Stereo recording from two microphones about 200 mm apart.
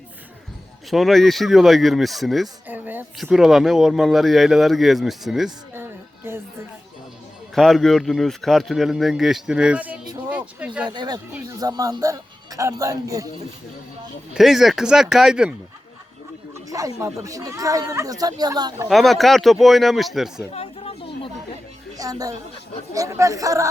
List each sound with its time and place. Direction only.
0.9 s speech: centre (ahead or behind)
5.5 s music: 10° right (ahead or behind)
7.5 s speech: centre (ahead or behind)
10.2 s a sound: 5° right (ahead or behind)
10.9 s speech: 20° right (ahead or behind)
11.3 s speech: 10° right (ahead or behind)
14.3 s speech: centre (ahead or behind)
16.6 s speech: 15° right (ahead or behind)
18.9 s speech: centre (ahead or behind)
20.5 s a sound: 30° left (ahead or behind)
21.9 s speech: 15° right (ahead or behind)